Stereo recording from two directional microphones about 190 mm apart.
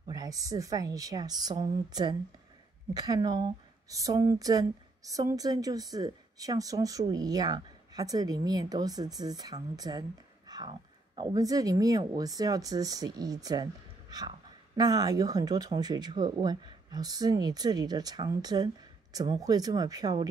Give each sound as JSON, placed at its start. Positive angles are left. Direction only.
{"t": 0.0, "sound": "speech", "side_deg": -20}